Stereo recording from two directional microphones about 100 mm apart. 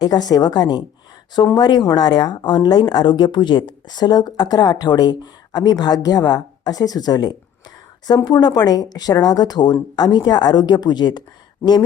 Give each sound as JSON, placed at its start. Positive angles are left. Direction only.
{"t": 0.0, "sound": "a woman's voice", "side_deg": 40}